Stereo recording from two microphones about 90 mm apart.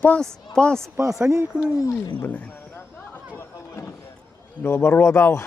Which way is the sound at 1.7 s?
35° left (ahead or behind).